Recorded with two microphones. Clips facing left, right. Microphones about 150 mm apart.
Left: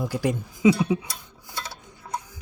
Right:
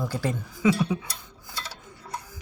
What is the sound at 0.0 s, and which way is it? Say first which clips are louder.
Speech: left 3 dB; 15° left (ahead or behind).